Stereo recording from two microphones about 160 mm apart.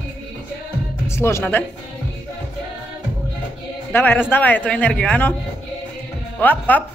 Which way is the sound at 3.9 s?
10° left (ahead or behind).